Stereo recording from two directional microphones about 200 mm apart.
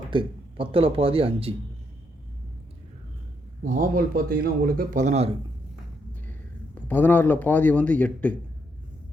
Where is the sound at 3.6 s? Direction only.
45° right (ahead or behind).